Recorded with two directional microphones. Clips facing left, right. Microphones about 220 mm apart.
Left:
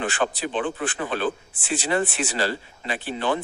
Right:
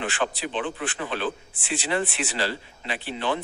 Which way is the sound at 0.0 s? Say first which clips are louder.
Left 3 dB; 45° left (ahead or behind).